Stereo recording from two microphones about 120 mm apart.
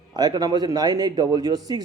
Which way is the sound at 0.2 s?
35° right (ahead or behind).